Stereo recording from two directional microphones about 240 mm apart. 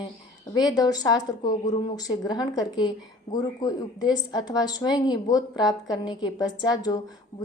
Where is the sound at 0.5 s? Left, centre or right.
Centre.